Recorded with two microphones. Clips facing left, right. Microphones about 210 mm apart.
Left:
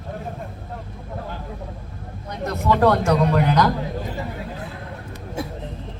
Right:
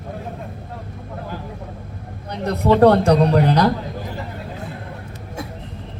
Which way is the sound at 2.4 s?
35° right (ahead or behind).